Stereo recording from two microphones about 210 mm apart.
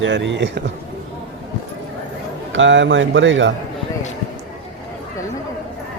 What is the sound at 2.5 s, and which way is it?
Speech, 60° right (ahead or behind).